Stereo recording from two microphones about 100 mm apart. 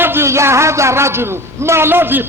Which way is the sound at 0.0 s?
25° right (ahead or behind).